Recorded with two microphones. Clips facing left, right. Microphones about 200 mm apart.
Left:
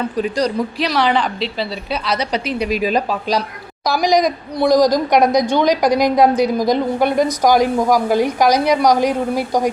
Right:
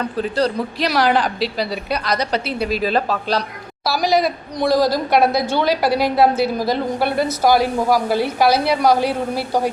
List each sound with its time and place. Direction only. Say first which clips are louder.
0.2 s a woman's voice: even; 10° left (ahead or behind)
0.9 s a woman's voice: right 2 dB; 5° right (ahead or behind); by 9.7 s 15° left (ahead or behind)